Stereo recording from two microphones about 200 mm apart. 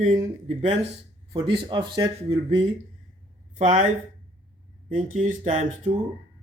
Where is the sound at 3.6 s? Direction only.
40° right (ahead or behind).